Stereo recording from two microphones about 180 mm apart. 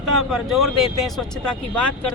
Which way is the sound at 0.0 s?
Centre (ahead or behind).